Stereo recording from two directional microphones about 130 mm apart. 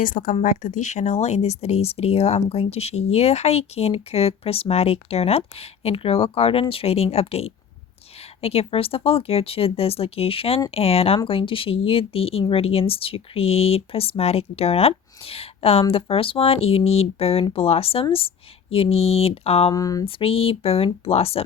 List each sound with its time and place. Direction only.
0.0 s speech: 90° left
0.4 s speech: 80° left; by 19.7 s 50° left (ahead or behind)
19.7 s speech: 25° left (ahead or behind)
20.1 s speech: 45° left (ahead or behind)